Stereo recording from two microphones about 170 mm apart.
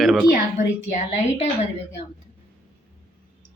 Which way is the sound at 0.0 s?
Centre (ahead or behind).